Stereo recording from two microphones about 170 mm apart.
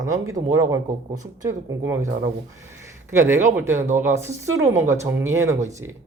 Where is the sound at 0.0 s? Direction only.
20° right (ahead or behind).